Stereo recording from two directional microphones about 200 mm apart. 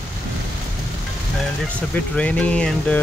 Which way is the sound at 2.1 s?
5° left (ahead or behind).